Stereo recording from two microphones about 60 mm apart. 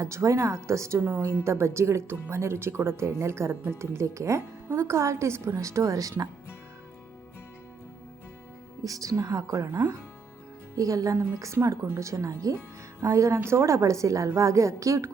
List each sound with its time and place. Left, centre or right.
0.0 s a woman's voice: right
3.5 s a woman's voice: right
3.8 s a woman's voice: right
8.8 s speech: right
10.8 s speech: right
13.0 s a woman's voice: right